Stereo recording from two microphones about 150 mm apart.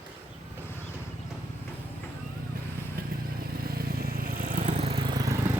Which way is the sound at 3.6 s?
85° right.